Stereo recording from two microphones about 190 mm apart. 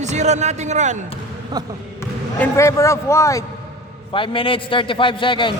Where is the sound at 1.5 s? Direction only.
20° right (ahead or behind).